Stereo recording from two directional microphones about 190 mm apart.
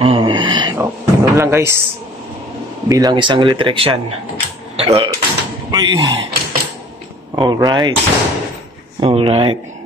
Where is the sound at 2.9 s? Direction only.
20° right (ahead or behind).